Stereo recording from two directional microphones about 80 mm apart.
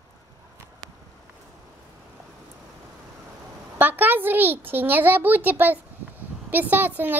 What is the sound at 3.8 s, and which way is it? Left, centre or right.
A woman's voice, right.